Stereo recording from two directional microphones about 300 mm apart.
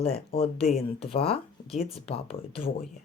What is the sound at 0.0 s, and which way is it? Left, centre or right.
Speech, centre.